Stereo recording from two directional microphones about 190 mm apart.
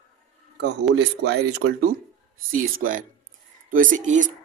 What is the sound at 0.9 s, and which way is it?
Speech, 60° right (ahead or behind).